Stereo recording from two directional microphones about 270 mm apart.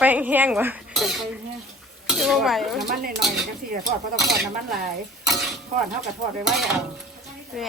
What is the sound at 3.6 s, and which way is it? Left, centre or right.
Speech, right.